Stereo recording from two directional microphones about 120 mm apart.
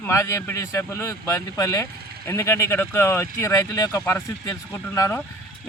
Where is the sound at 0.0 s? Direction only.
20° left (ahead or behind).